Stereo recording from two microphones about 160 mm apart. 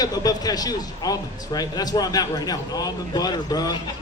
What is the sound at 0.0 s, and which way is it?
A man's voice, 25° left (ahead or behind).